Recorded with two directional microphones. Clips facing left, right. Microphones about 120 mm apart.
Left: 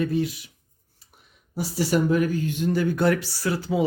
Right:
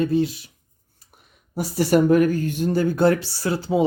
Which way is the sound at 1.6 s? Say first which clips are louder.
Right 5 dB; 50° right (ahead or behind).